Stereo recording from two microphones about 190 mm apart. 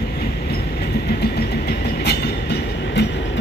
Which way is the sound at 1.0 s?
60° left (ahead or behind).